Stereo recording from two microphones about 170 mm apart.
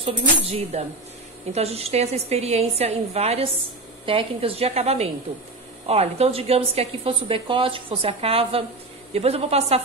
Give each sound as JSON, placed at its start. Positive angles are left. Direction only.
{"t": 0.0, "sound": "a woman's voice", "side_deg": -40}